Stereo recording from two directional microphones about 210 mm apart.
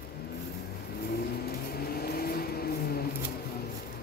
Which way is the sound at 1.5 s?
45° left (ahead or behind).